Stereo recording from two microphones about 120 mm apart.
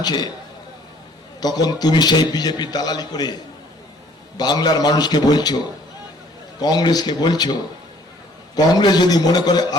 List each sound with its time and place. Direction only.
0.0 s a man's voice: 35° left (ahead or behind)
1.4 s a man's voice: 35° left (ahead or behind)
4.4 s a man's voice: 35° left (ahead or behind)
6.6 s a man's voice: 35° left (ahead or behind)
8.5 s a man's voice: 35° left (ahead or behind)